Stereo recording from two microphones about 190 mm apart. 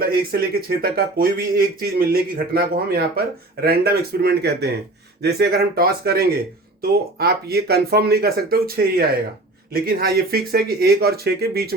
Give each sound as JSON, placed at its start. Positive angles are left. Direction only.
{"t": 0.0, "sound": "speech", "side_deg": -50}